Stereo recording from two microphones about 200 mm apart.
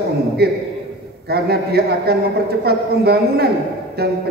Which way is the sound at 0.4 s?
55° right (ahead or behind).